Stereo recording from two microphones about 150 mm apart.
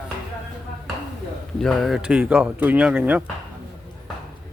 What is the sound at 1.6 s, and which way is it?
Speech, centre (ahead or behind).